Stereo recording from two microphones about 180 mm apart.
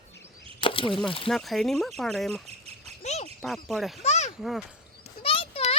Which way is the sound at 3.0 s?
40° left (ahead or behind).